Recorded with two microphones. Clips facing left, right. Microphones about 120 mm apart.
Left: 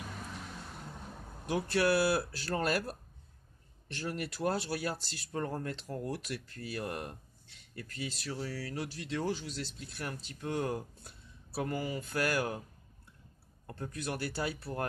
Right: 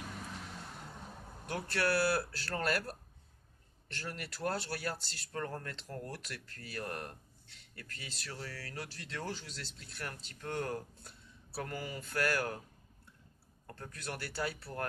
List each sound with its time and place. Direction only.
1.4 s speech: 15° left (ahead or behind)
13.7 s speech: 15° left (ahead or behind)